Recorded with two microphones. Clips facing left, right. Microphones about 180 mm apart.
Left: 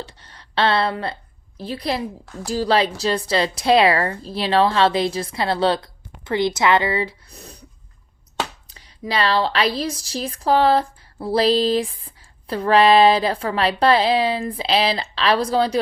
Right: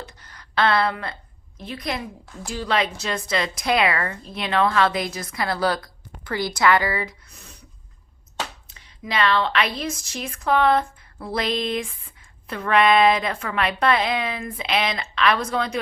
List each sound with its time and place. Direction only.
0.0 s a woman's voice: 30° left (ahead or behind)
8.6 s a woman's voice: 35° left (ahead or behind)